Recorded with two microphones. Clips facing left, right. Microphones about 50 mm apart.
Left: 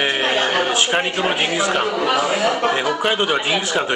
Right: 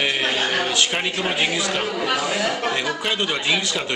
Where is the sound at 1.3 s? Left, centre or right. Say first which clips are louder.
Left 3 dB; left.